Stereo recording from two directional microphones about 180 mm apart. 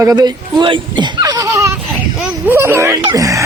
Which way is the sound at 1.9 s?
10° right (ahead or behind).